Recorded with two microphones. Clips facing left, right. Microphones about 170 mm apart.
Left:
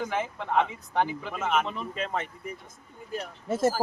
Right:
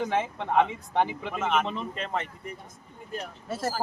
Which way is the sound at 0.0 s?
25° right (ahead or behind).